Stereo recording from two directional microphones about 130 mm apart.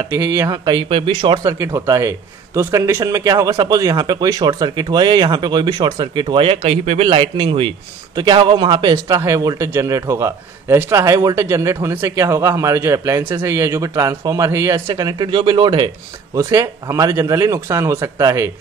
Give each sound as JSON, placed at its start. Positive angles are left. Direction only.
{"t": 0.1, "sound": "a man's voice", "side_deg": -25}
{"t": 1.4, "sound": "a man's voice", "side_deg": -20}
{"t": 7.1, "sound": "a man's voice", "side_deg": -40}
{"t": 16.3, "sound": "a man's voice", "side_deg": -25}